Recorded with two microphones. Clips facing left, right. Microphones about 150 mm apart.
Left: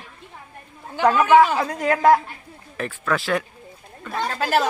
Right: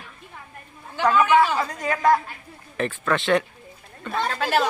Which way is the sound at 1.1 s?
45° left (ahead or behind).